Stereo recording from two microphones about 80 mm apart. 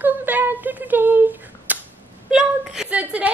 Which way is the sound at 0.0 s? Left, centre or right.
Right.